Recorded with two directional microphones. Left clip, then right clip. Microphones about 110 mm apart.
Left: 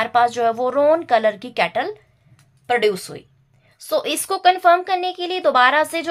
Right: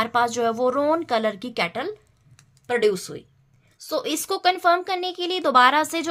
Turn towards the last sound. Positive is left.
turn(degrees=-55)  # may be behind; listen again after turning